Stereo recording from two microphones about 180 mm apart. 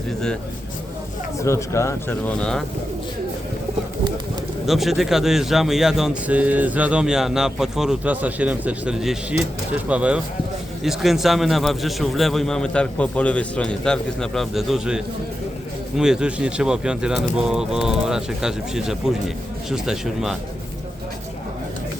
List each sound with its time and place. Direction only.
1.4 s speech: 15° left (ahead or behind)
4.6 s a man's voice: centre (ahead or behind)